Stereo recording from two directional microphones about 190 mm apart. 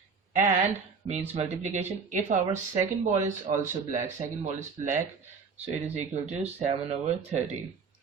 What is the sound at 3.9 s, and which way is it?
Speech, 15° right (ahead or behind).